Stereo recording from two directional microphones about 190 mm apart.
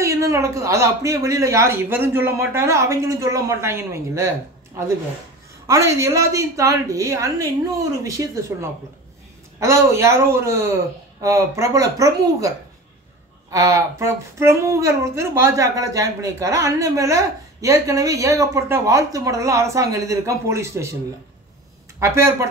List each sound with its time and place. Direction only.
0.0 s a woman's voice: 15° right (ahead or behind)
5.7 s a woman's voice: 15° right (ahead or behind)
22.0 s a woman's voice: 15° right (ahead or behind)